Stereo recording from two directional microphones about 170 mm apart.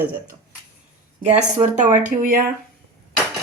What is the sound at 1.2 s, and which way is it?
Speech, 40° right (ahead or behind).